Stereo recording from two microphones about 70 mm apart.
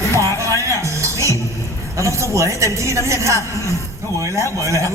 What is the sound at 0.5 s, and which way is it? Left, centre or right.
Music, right.